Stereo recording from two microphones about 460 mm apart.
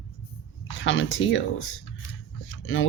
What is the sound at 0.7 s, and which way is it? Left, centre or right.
Speech, left.